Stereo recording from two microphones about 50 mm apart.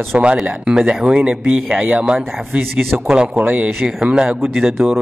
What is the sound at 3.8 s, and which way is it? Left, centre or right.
Speech, centre.